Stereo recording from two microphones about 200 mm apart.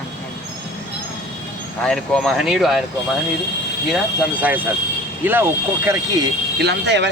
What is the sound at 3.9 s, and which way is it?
Speech, 10° right (ahead or behind).